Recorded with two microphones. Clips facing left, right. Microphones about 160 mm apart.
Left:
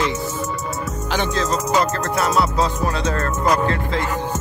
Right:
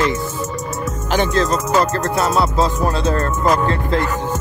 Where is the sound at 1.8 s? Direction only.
35° right (ahead or behind).